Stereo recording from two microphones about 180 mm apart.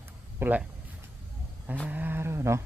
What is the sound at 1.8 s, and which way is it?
Speech, 10° right (ahead or behind).